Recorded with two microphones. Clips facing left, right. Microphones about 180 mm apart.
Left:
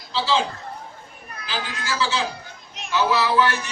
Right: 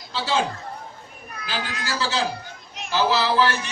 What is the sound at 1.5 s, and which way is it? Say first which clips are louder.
A man's voice: even; 40° right (ahead or behind).